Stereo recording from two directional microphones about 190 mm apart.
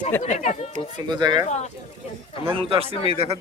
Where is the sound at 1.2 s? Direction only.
20° right (ahead or behind).